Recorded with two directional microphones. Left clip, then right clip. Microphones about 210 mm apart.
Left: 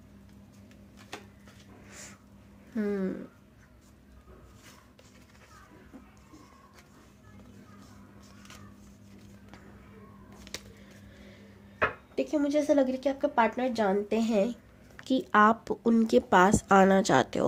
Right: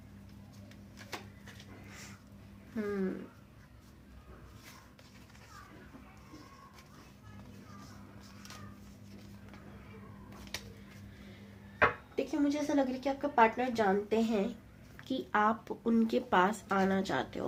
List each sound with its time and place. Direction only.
2.7 s speech: 50° left (ahead or behind)
12.1 s speech: 50° left (ahead or behind)